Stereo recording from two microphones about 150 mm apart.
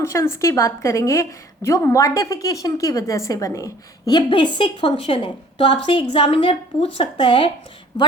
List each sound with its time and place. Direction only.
0.0 s a woman's voice: 20° left (ahead or behind)